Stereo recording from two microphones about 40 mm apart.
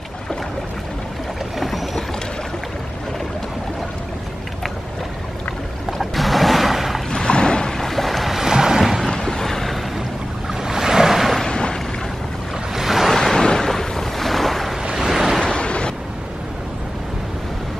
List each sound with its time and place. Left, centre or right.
1.6 s boat: centre
5.9 s music: centre
7.1 s boat: left
7.8 s boat: centre
8.5 s boat: centre
9.1 s boat: centre
10.6 s waves: centre
11.4 s boat: centre
12.7 s waves: centre
13.1 s waves: centre
13.7 s boat: centre
14.8 s waves: centre
15.4 s a sound: left